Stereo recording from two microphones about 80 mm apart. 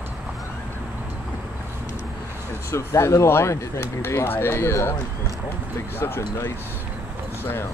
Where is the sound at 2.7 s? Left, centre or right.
Left.